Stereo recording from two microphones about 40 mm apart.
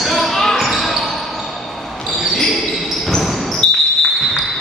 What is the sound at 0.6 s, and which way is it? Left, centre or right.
Basketball bounce, centre.